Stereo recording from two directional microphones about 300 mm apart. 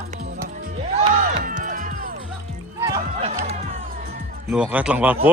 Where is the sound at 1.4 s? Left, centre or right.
Right.